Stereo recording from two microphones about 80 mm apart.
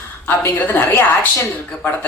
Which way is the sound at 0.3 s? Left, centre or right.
Left.